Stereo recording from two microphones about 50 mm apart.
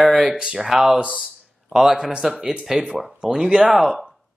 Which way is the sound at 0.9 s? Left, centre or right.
Right.